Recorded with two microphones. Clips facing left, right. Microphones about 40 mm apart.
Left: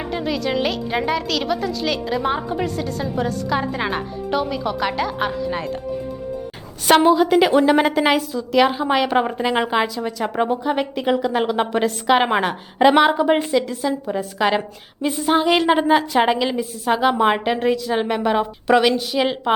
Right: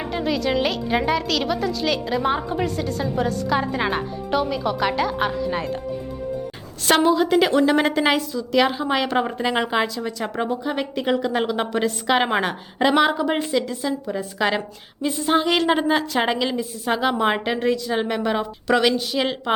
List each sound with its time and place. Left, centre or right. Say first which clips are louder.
0.0 s a woman's voice: even; centre
7.2 s a woman's voice: left 2 dB; centre
10.4 s a woman's voice: left 4 dB; left
11.0 s a woman's voice: left 1 dB; centre
13.0 s a woman's voice: left 4 dB; left
13.3 s a woman's voice: left 4 dB; centre